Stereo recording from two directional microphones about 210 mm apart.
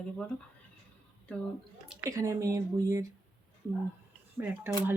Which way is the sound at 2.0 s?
15° right (ahead or behind).